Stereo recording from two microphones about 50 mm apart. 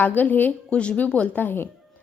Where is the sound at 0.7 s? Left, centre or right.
Left.